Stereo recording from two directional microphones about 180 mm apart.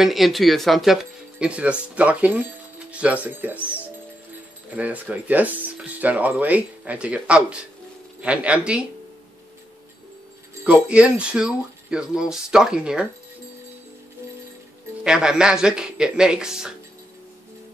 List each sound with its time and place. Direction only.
0.0 s speech: centre (ahead or behind)
4.7 s speech: 10° right (ahead or behind)
10.6 s speech: 5° right (ahead or behind)
15.0 s speech: 5° right (ahead or behind)